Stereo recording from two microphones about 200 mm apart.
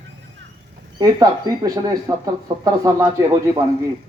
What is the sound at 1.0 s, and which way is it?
Speech, 20° right (ahead or behind).